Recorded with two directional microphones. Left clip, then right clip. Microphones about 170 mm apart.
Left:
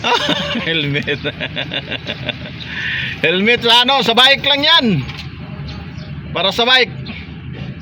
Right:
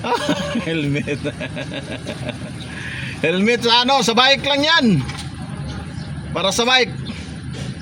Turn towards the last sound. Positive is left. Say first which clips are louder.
# left 3 dB
turn(degrees=-10)  # may be behind; listen again after turning